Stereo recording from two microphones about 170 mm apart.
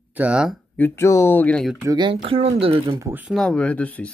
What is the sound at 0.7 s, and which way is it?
Speech, 15° left (ahead or behind).